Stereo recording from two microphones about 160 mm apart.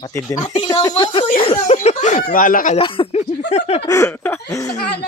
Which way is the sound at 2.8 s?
35° left (ahead or behind).